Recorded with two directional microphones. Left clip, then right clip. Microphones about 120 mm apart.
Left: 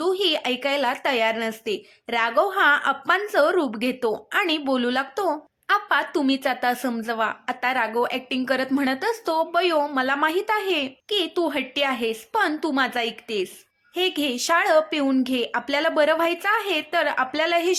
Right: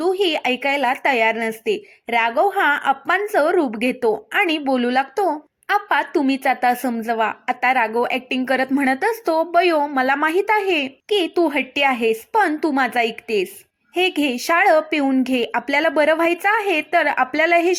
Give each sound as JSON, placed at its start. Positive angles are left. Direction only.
{"t": 0.0, "sound": "speech", "side_deg": -25}